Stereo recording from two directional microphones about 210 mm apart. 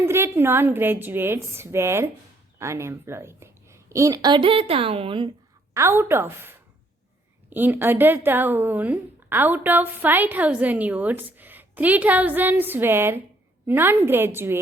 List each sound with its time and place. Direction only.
0.0 s a woman's voice: 10° right (ahead or behind)
5.7 s a woman's voice: 10° right (ahead or behind)
7.5 s a woman's voice: 10° right (ahead or behind)